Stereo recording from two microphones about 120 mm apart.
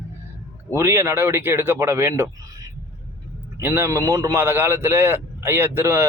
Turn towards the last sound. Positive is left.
turn(degrees=-25)  # may be behind; listen again after turning